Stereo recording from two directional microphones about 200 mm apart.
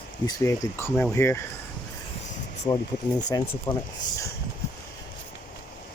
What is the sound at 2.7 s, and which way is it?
Speech, 15° left (ahead or behind).